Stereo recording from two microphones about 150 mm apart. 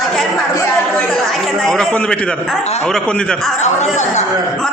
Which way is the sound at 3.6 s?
50° left (ahead or behind).